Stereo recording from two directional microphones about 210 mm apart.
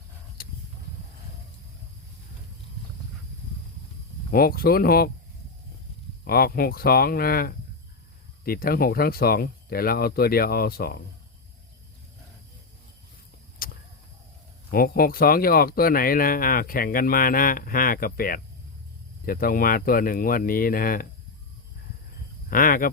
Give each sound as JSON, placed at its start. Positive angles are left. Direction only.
{"t": 0.4, "sound": "a sound", "side_deg": 45}
{"t": 4.3, "sound": "speech", "side_deg": 45}
{"t": 6.2, "sound": "speech", "side_deg": 45}
{"t": 13.6, "sound": "vehicle", "side_deg": 45}
{"t": 14.7, "sound": "speech", "side_deg": 45}
{"t": 22.4, "sound": "speech", "side_deg": 40}